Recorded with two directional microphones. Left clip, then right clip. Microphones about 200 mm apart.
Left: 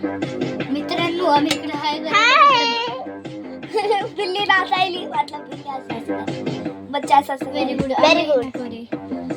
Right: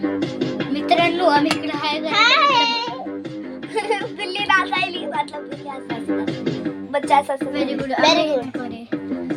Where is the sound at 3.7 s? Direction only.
20° left (ahead or behind).